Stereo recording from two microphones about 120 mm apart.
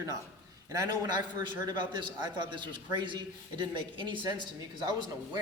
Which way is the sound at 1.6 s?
40° right (ahead or behind).